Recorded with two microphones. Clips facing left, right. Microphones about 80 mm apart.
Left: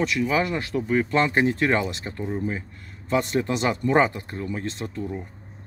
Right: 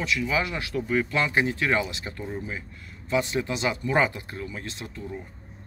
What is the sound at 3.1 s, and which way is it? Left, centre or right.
Speech, left.